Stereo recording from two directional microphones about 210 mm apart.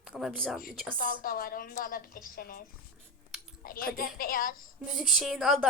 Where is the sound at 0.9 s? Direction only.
40° left (ahead or behind).